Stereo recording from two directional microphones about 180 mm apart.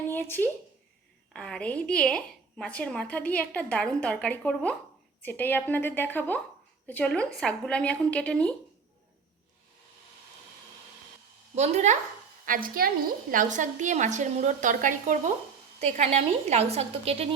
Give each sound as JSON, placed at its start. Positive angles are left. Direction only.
{"t": 0.1, "sound": "a sound", "side_deg": 10}
{"t": 1.3, "sound": "speech", "side_deg": 5}
{"t": 11.5, "sound": "a woman's voice", "side_deg": -40}
{"t": 12.5, "sound": "a woman's voice", "side_deg": -50}